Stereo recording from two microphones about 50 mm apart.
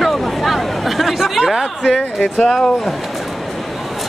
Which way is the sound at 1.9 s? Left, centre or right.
Centre.